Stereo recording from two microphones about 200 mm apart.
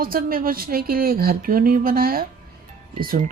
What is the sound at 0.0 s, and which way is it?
Speech, 45° right (ahead or behind).